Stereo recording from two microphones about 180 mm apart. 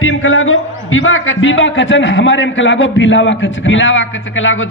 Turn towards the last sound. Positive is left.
turn(degrees=90)